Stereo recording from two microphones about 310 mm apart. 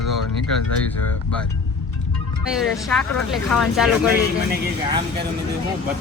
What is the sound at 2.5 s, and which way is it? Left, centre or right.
Speech, centre.